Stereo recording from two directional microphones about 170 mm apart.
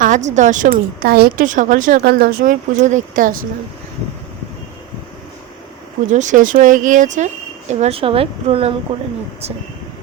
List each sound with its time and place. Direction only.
0.0 s a woman's voice: 45° right (ahead or behind)
2.0 s speech: 65° right (ahead or behind)
6.1 s a woman's voice: 45° right (ahead or behind)